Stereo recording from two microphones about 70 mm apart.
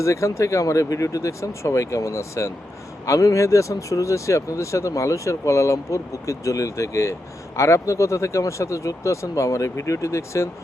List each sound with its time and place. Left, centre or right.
0.0 s speech: left